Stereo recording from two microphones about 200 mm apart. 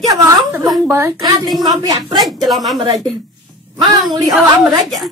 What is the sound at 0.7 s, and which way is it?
Speech, 10° right (ahead or behind).